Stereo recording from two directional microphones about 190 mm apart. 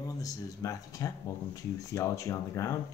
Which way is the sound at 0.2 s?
15° left (ahead or behind).